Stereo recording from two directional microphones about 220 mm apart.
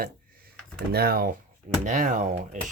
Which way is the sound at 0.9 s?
45° right (ahead or behind).